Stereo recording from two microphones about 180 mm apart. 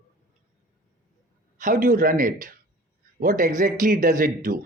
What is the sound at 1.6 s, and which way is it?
Speech, 50° right (ahead or behind).